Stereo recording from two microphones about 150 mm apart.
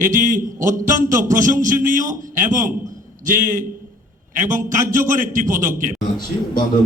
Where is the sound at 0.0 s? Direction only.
60° right (ahead or behind).